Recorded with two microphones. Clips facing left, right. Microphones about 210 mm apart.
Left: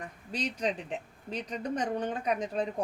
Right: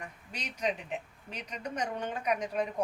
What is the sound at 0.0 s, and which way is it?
A woman's voice, 35° left (ahead or behind).